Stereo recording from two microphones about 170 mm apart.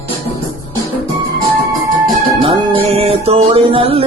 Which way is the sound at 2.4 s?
30° right (ahead or behind).